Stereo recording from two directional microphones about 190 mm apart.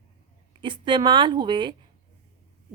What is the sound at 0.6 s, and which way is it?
A woman's voice, 25° right (ahead or behind).